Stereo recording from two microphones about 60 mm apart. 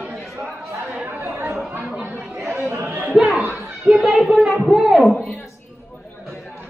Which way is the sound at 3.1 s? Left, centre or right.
Centre.